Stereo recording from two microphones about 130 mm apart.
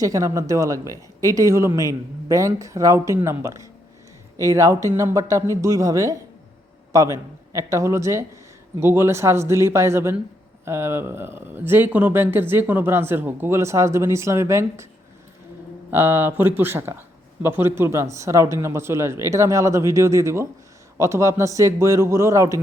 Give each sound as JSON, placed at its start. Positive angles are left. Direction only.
{"t": 0.0, "sound": "speech", "side_deg": -25}
{"t": 15.9, "sound": "speech", "side_deg": -15}